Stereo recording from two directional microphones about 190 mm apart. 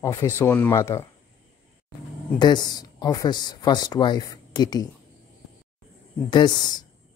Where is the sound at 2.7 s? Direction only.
20° left (ahead or behind).